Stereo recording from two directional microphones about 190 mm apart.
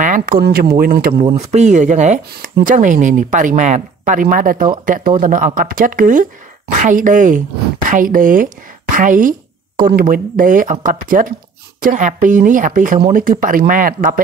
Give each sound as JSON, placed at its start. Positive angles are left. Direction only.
{"t": 0.0, "sound": "speech", "side_deg": -45}
{"t": 1.3, "sound": "speech", "side_deg": -35}